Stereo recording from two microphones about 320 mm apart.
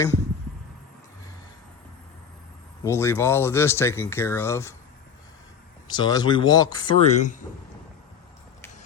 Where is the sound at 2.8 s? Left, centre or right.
Centre.